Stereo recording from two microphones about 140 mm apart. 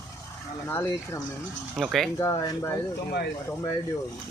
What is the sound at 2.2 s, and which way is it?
Speech, 20° left (ahead or behind).